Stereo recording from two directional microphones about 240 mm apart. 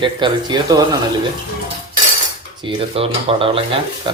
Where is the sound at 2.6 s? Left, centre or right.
Right.